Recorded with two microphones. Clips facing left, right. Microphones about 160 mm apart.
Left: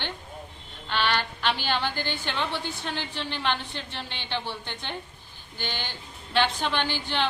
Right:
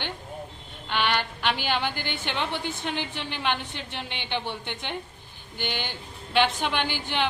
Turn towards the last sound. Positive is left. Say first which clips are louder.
# even
turn(degrees=-15)  # may be behind; listen again after turning